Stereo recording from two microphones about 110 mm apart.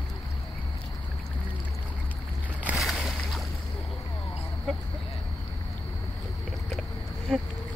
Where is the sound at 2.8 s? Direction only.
Centre (ahead or behind).